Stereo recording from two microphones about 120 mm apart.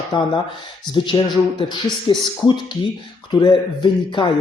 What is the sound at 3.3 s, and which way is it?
Speech, 40° left (ahead or behind).